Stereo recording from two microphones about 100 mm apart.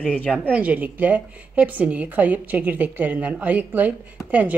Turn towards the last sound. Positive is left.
turn(degrees=-15)  # may be behind; listen again after turning